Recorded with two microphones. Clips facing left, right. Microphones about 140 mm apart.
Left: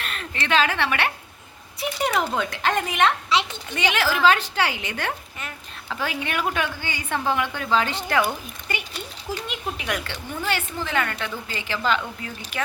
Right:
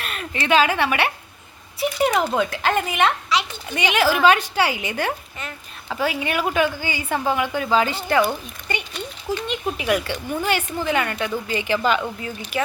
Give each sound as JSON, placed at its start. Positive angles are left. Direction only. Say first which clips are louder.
{"t": 0.0, "sound": "a woman's voice", "louder": "right 3 dB", "side_deg": -10}
{"t": 3.2, "sound": "a child's voice", "louder": "even", "side_deg": 25}
{"t": 3.7, "sound": "a woman's voice", "louder": "right 5 dB", "side_deg": -15}